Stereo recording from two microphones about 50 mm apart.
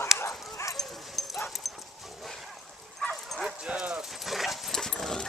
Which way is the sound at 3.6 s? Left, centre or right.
Centre.